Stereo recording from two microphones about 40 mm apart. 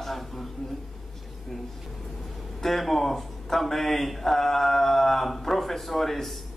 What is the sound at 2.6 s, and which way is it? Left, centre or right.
Speech, centre.